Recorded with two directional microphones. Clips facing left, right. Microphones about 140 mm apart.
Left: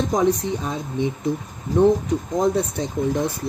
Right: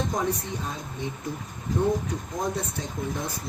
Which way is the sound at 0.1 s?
80° left.